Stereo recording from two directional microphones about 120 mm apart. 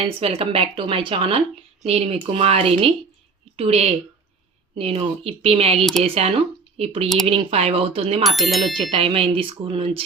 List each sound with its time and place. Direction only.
0.0 s speech: 55° right (ahead or behind)
1.8 s speech: 60° right (ahead or behind)
8.2 s speech: centre (ahead or behind)
8.9 s speech: 50° right (ahead or behind)